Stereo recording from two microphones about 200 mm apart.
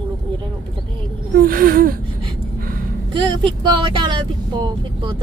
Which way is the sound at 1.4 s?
45° right (ahead or behind).